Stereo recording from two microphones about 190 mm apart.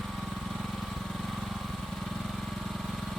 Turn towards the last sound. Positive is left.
turn(degrees=0)  # may be behind; listen again after turning